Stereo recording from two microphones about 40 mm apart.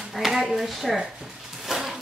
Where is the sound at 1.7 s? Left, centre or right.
Centre.